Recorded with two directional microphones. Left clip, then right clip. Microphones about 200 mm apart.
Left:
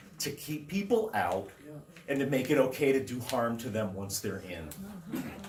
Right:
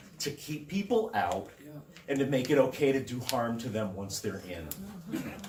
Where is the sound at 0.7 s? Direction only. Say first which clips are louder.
Even; 30° left (ahead or behind).